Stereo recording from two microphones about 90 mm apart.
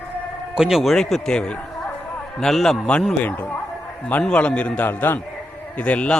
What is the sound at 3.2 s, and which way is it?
A man's voice, 15° left (ahead or behind).